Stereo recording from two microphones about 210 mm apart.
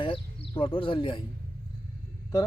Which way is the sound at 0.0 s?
25° left (ahead or behind).